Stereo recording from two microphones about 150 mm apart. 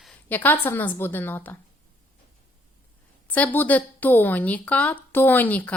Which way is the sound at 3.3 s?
10° left (ahead or behind).